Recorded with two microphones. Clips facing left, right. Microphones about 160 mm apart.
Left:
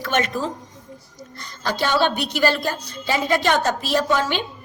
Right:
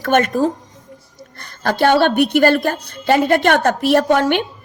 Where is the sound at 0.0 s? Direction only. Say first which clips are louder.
Right 8 dB; 50° right (ahead or behind).